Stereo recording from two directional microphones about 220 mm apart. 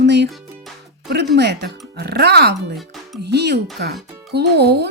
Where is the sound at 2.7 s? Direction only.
Centre (ahead or behind).